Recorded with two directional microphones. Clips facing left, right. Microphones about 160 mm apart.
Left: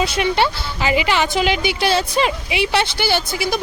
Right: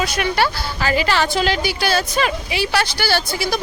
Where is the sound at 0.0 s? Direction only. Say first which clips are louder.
Left 2 dB; 25° left (ahead or behind).